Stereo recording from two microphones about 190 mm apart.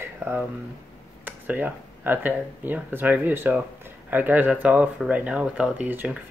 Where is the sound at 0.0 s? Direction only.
10° right (ahead or behind).